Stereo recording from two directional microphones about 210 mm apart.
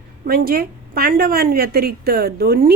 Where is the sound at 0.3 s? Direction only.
45° right (ahead or behind).